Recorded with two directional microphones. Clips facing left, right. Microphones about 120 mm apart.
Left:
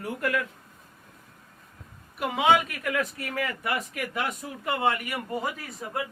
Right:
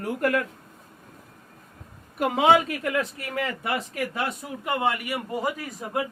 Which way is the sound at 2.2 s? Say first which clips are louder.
Right 3 dB; 40° right (ahead or behind).